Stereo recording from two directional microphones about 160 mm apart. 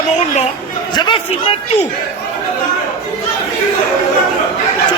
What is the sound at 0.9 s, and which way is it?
Speech, 30° left (ahead or behind).